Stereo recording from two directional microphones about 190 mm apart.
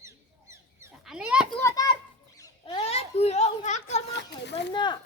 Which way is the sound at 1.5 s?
15° left (ahead or behind).